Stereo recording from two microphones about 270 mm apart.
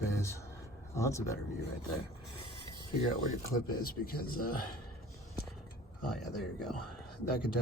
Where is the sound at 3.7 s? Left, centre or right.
Left.